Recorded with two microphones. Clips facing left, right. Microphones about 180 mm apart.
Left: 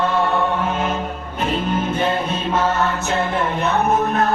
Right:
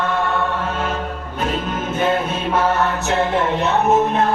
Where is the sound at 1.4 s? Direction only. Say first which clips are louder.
Left 2 dB; centre (ahead or behind).